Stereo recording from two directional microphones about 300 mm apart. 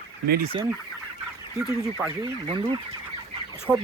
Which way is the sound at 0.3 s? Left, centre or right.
Right.